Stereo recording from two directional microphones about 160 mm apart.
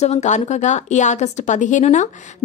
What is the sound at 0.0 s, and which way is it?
A woman's voice, 45° left (ahead or behind).